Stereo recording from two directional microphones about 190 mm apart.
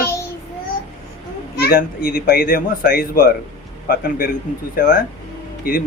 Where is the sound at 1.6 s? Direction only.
50° left (ahead or behind).